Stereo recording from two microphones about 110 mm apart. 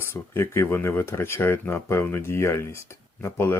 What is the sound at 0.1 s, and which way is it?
Speech, 25° left (ahead or behind).